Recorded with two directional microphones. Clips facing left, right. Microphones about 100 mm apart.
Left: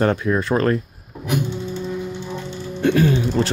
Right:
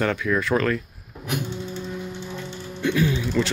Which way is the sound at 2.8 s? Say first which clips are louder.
Left 5 dB; 50° left (ahead or behind).